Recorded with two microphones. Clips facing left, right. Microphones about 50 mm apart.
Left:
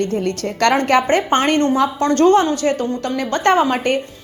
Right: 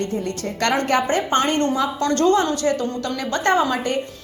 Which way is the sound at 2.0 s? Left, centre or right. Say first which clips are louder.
Left 4 dB; left.